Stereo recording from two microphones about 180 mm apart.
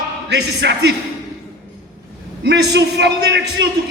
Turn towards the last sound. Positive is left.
turn(degrees=-70)  # may be behind; listen again after turning